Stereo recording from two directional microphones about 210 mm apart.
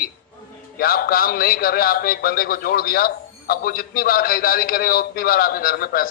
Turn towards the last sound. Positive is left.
turn(degrees=45)  # may be behind; listen again after turning